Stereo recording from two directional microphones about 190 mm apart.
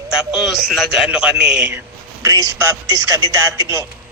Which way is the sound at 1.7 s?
15° right (ahead or behind).